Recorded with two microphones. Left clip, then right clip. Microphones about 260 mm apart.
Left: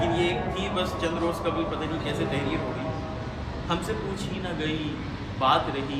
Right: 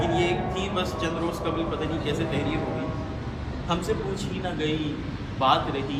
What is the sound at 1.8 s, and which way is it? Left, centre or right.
Speech, centre.